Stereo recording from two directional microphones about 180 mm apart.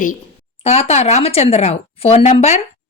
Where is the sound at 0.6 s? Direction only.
35° left (ahead or behind).